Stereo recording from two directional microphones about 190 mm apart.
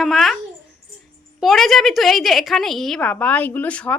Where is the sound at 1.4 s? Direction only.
Centre (ahead or behind).